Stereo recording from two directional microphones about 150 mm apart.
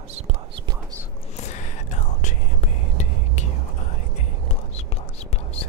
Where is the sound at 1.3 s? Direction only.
50° left (ahead or behind).